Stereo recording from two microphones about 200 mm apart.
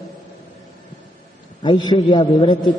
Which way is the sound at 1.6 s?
20° left (ahead or behind).